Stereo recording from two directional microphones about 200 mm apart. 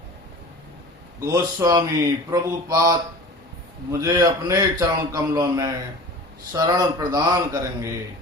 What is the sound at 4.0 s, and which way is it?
A man's voice, 15° right (ahead or behind).